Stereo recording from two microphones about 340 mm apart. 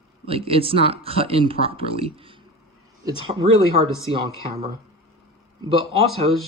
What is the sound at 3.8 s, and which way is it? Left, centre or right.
Speech, centre.